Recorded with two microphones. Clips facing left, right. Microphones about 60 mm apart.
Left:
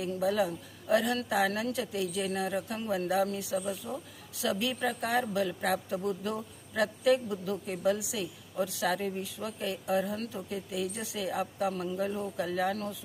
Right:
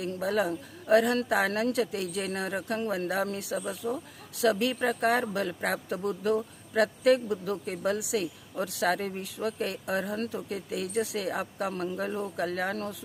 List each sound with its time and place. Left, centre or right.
0.0 s speech: right